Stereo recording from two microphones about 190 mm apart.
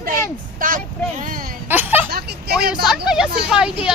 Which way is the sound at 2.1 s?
55° right (ahead or behind).